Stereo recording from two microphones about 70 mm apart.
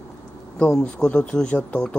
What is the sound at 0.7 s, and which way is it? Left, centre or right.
Speech, centre.